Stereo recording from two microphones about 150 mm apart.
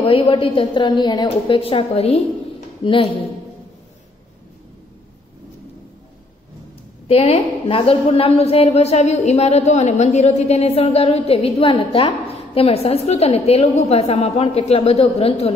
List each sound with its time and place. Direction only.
0.0 s a woman's voice: 35° left (ahead or behind)
1.6 s a woman's voice: 40° left (ahead or behind)
7.1 s a woman's voice: 40° left (ahead or behind)